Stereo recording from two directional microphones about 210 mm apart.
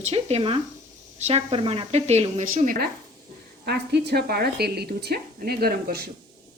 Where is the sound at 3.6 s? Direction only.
50° right (ahead or behind).